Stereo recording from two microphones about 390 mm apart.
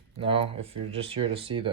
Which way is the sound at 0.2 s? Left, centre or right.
Centre.